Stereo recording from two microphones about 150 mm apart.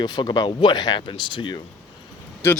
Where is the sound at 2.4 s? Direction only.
15° left (ahead or behind).